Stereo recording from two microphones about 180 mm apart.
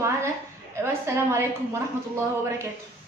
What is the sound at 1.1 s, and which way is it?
Speech, 15° right (ahead or behind).